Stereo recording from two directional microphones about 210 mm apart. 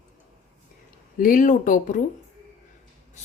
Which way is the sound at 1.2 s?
40° left (ahead or behind).